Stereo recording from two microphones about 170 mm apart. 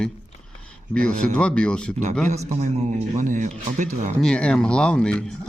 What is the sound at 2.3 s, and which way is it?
A man's voice, 40° right (ahead or behind).